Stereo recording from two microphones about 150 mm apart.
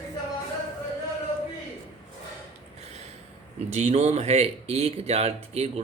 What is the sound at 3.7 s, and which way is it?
Speech, 50° right (ahead or behind).